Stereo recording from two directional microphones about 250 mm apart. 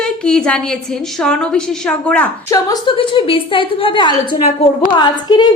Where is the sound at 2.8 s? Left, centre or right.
Left.